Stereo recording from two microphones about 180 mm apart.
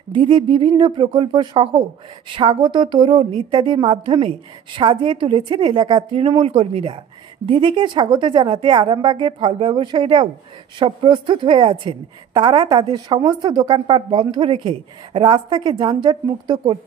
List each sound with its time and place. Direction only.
0.1 s a woman's voice: 25° right (ahead or behind)